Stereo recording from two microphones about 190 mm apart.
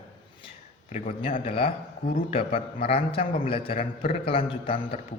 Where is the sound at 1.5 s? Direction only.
30° left (ahead or behind).